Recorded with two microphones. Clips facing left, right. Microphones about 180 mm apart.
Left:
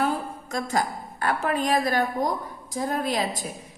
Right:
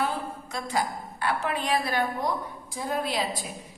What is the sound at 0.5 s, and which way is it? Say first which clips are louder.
A woman's voice: left 3 dB; 45° left (ahead or behind).